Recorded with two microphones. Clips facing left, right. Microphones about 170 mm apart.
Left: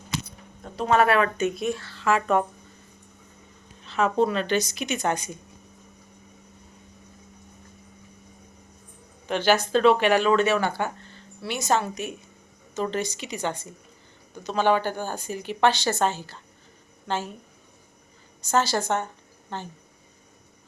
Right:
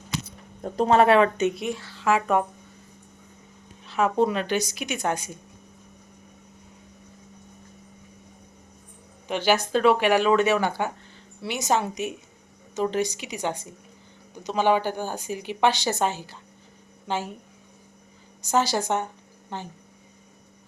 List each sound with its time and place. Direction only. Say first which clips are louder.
0.9 s speech: right 2 dB; 25° right (ahead or behind)
3.8 s speech: even; 10° right (ahead or behind)
9.2 s speech: left 1 dB; 10° right (ahead or behind)
18.4 s speech: even; 15° right (ahead or behind)